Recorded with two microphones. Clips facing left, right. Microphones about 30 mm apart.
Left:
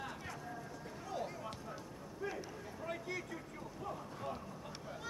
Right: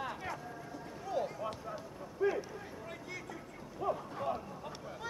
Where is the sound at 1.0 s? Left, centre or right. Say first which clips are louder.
Right 7 dB; centre.